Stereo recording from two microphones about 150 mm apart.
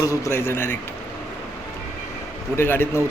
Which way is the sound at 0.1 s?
15° left (ahead or behind).